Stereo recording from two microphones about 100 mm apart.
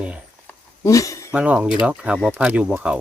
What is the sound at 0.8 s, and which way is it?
Speech, 30° left (ahead or behind).